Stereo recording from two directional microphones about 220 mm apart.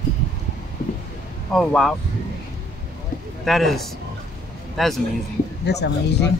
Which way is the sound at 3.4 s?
Centre (ahead or behind).